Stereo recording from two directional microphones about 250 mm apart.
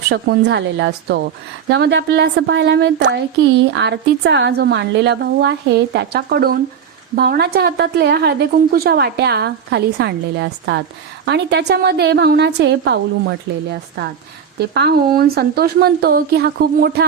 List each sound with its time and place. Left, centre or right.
0.1 s a woman's voice: right